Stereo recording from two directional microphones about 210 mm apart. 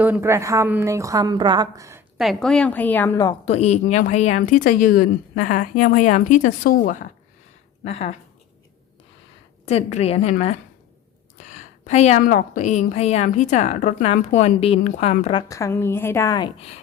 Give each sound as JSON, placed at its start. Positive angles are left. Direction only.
{"t": 0.0, "sound": "a woman's voice", "side_deg": -10}
{"t": 2.1, "sound": "a woman's voice", "side_deg": 0}
{"t": 3.4, "sound": "a woman's voice", "side_deg": 30}
{"t": 9.6, "sound": "a woman's voice", "side_deg": 30}
{"t": 15.4, "sound": "a woman's voice", "side_deg": 15}